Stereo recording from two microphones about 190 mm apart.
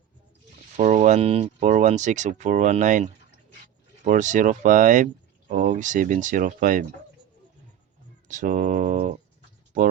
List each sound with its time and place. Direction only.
0.8 s speech: 40° right (ahead or behind)
8.3 s speech: 45° right (ahead or behind)